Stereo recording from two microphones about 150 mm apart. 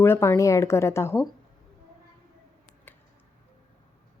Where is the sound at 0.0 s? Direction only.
15° left (ahead or behind).